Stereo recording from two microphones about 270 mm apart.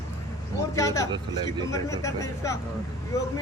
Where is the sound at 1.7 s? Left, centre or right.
Centre.